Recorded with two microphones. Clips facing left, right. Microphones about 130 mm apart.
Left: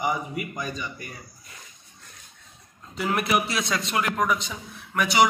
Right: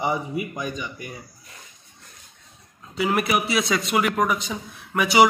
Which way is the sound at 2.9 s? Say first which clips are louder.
Right 2 dB; centre (ahead or behind).